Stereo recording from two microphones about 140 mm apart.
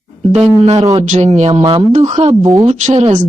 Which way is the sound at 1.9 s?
55° right (ahead or behind).